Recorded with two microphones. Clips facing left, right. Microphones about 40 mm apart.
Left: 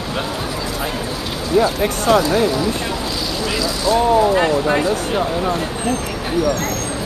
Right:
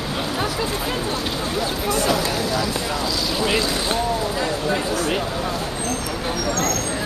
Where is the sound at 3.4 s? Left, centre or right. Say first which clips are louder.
Left 3 dB; right.